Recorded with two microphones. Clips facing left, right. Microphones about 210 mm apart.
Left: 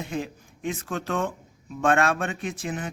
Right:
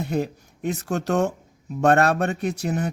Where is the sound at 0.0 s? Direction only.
40° right (ahead or behind).